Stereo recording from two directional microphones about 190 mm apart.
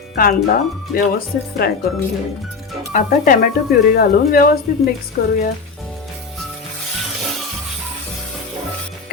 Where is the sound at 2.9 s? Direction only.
45° left (ahead or behind).